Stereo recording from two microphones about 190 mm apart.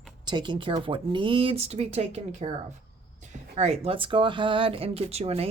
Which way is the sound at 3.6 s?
35° right (ahead or behind).